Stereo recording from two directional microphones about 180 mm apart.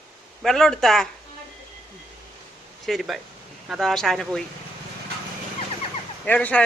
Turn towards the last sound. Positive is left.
turn(degrees=10)  # may be behind; listen again after turning